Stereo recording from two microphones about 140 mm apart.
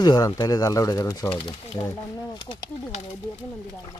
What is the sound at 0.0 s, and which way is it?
Speech, 30° left (ahead or behind).